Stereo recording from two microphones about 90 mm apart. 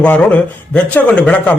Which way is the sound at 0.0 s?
15° left (ahead or behind).